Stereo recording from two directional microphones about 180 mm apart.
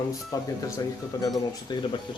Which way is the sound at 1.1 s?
20° left (ahead or behind).